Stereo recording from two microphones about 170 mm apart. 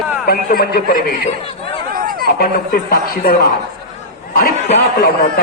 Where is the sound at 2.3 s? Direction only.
65° left (ahead or behind).